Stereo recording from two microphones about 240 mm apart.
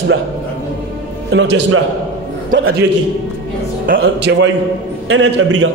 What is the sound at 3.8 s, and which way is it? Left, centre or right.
A man's voice, right.